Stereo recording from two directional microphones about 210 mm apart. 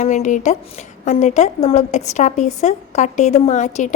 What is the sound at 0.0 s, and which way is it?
A woman's voice, 35° left (ahead or behind).